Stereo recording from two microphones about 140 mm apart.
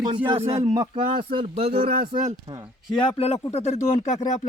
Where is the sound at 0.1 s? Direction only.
40° right (ahead or behind).